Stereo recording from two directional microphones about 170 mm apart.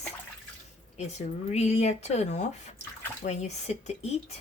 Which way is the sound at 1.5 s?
40° left (ahead or behind).